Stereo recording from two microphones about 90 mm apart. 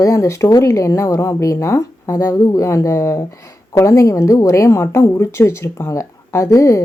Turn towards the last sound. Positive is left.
turn(degrees=35)  # may be behind; listen again after turning